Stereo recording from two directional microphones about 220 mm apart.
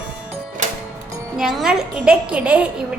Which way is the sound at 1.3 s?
Centre (ahead or behind).